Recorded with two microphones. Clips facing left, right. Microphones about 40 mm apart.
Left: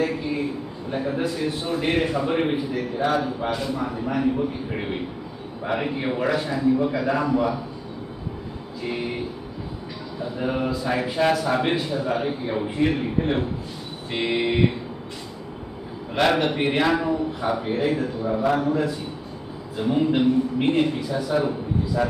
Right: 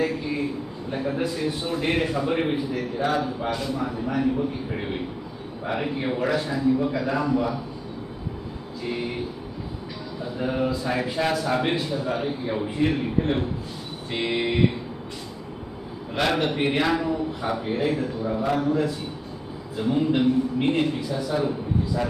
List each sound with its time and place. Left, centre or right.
0.8 s a man's voice: centre
5.6 s a man's voice: centre
10.4 s a man's voice: centre
14.1 s a sound: centre
16.2 s a man's voice: centre